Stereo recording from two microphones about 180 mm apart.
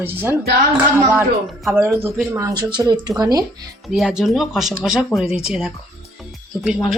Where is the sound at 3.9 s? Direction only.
Centre (ahead or behind).